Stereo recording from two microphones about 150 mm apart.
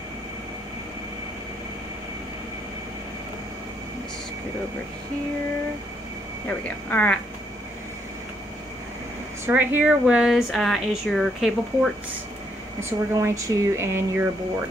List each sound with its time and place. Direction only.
6.4 s a woman's voice: 10° left (ahead or behind)
9.5 s speech: 10° right (ahead or behind)
13.1 s speech: 20° right (ahead or behind)